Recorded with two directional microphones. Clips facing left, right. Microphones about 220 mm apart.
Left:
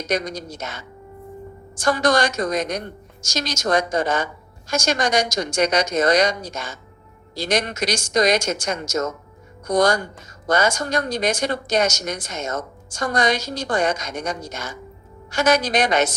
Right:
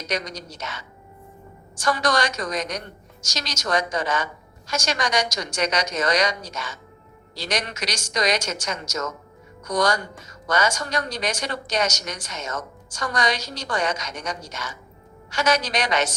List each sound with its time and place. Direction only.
0.3 s speech: 50° left (ahead or behind)
1.8 s speech: 50° left (ahead or behind)